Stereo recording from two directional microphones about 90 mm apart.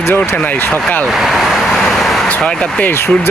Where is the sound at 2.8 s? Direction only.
25° left (ahead or behind).